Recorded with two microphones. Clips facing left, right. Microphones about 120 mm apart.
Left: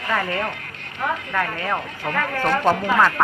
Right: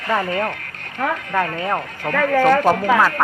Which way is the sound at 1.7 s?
45° right (ahead or behind).